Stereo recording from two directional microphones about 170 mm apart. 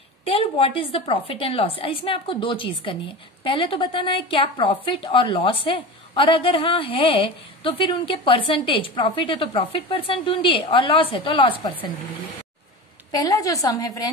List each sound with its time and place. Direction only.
0.3 s a woman's voice: 35° left (ahead or behind)
13.1 s a woman's voice: 20° left (ahead or behind)